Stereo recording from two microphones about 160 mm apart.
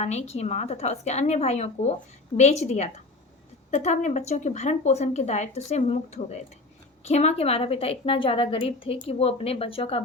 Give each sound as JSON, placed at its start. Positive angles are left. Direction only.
{"t": 0.0, "sound": "a woman's voice", "side_deg": 45}